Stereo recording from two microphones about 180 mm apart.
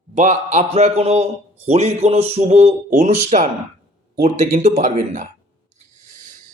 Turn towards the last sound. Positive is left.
turn(degrees=-45)  # may be behind; listen again after turning